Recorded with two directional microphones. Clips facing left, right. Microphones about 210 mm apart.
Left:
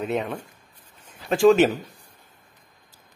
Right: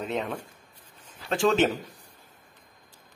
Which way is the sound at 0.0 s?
10° left (ahead or behind).